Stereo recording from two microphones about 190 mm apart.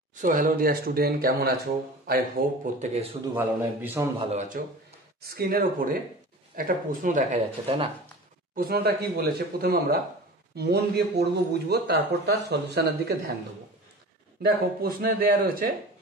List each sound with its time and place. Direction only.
0.1 s speech: 45° right (ahead or behind)
3.3 s a man's voice: 10° right (ahead or behind)
4.2 s speech: 35° right (ahead or behind)
5.2 s speech: 55° right (ahead or behind); by 7.9 s 30° right (ahead or behind)
8.5 s a man's voice: 55° right (ahead or behind)
14.4 s speech: 50° right (ahead or behind)